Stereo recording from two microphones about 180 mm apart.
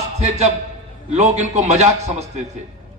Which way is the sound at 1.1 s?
40° right (ahead or behind).